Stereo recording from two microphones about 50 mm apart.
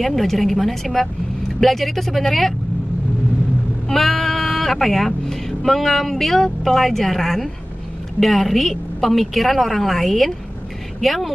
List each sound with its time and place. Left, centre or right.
0.0 s a woman's voice: centre
3.9 s a woman's voice: centre